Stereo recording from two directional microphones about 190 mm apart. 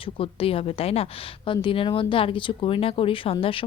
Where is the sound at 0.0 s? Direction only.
30° left (ahead or behind).